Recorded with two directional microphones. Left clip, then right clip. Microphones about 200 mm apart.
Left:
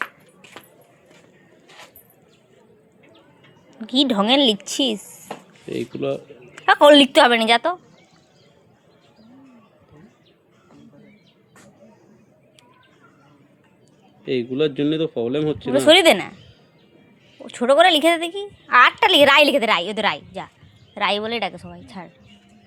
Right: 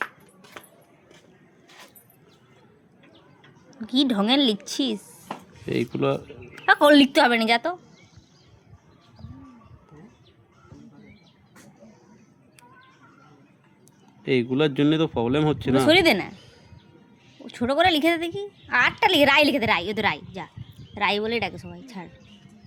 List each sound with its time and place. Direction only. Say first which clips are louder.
3.8 s a woman's voice: left 4 dB; 5° left (ahead or behind)
5.6 s speech: right 1 dB; 60° right (ahead or behind)
6.5 s a sound: left 2 dB; 10° left (ahead or behind)
6.7 s a woman's voice: left 6 dB; centre (ahead or behind)
14.3 s speech: left 1 dB; 55° right (ahead or behind)
15.7 s a woman's voice: left 6 dB; 5° left (ahead or behind)
17.4 s a woman's voice: left 7 dB; 5° left (ahead or behind)